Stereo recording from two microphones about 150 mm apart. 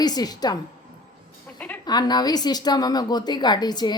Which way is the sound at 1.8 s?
25° left (ahead or behind).